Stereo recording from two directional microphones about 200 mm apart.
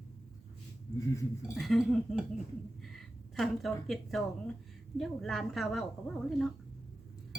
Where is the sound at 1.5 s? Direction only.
Centre (ahead or behind).